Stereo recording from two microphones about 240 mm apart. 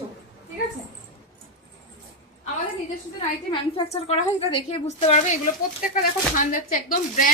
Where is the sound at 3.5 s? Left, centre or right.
Left.